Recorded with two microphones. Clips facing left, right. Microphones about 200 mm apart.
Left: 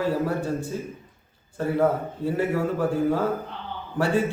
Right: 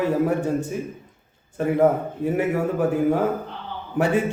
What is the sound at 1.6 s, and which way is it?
A man's voice, 20° right (ahead or behind).